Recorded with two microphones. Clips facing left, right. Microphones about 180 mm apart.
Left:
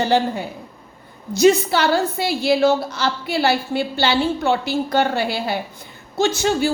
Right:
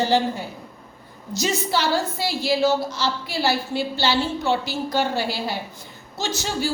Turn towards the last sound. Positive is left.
turn(degrees=55)  # may be behind; listen again after turning